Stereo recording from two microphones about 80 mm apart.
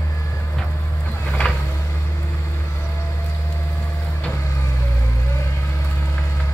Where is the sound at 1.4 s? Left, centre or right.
Centre.